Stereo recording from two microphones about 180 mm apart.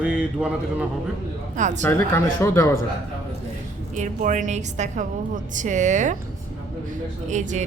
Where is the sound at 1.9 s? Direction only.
10° left (ahead or behind).